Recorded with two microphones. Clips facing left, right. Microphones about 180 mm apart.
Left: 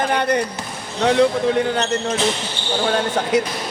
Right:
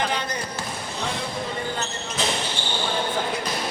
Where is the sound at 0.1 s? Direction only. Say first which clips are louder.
Left 9 dB; 60° left (ahead or behind).